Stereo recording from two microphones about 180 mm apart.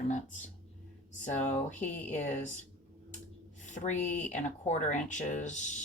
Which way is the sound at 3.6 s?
40° left (ahead or behind).